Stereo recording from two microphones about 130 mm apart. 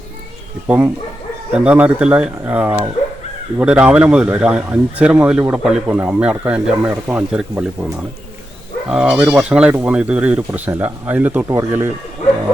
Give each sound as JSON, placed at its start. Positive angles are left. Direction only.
{"t": 1.5, "sound": "speech", "side_deg": -10}
{"t": 8.9, "sound": "speech", "side_deg": -10}